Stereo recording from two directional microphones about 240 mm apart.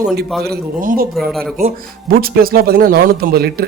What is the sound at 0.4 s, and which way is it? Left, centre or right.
Speech, right.